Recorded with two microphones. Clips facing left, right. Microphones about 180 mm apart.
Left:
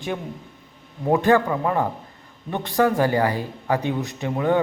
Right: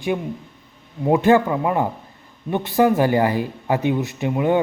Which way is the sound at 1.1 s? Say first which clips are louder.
Right 2 dB; 15° right (ahead or behind).